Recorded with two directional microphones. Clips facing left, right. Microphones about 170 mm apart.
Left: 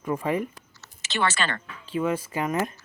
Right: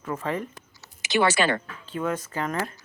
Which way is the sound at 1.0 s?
15° right (ahead or behind).